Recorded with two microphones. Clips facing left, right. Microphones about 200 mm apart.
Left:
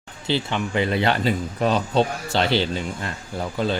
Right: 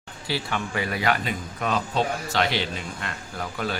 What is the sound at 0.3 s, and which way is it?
A man's voice, 25° left (ahead or behind).